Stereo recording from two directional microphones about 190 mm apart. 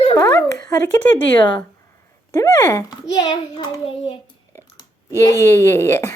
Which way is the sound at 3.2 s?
20° left (ahead or behind).